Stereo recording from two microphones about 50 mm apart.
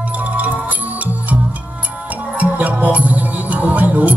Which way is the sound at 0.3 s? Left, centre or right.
Right.